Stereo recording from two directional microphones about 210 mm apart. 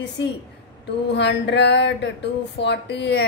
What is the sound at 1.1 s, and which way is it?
A woman's voice, 55° left (ahead or behind).